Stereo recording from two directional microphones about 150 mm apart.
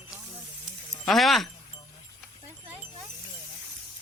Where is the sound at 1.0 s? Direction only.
Centre (ahead or behind).